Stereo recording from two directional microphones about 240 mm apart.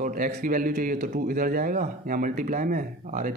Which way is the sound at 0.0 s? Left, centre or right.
Right.